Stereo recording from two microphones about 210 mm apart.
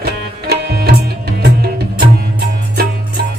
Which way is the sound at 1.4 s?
45° right (ahead or behind).